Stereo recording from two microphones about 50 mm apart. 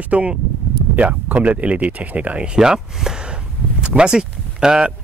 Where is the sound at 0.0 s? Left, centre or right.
Right.